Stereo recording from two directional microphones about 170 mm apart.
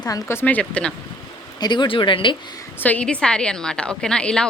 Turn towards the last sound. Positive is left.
turn(degrees=5)  # may be behind; listen again after turning